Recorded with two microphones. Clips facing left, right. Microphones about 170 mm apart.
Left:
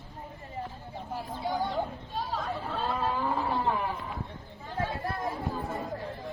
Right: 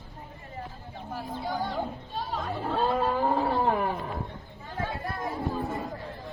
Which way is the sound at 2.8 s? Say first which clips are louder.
Right 6 dB; 50° right (ahead or behind).